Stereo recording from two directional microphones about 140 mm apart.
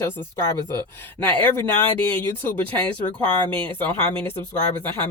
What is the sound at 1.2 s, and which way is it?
Speech, 15° left (ahead or behind).